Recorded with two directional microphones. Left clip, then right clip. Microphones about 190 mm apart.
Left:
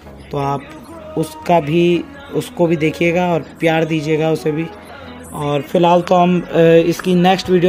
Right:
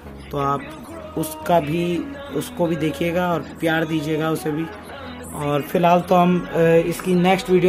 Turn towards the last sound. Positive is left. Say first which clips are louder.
# left 4 dB
turn(degrees=25)  # may be behind; listen again after turning